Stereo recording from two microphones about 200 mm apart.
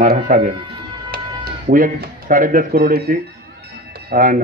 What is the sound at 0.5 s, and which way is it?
Speech, 25° right (ahead or behind).